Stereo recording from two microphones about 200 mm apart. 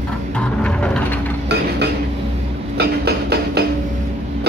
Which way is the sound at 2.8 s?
55° right (ahead or behind).